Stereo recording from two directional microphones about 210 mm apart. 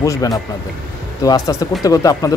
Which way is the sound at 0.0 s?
15° left (ahead or behind).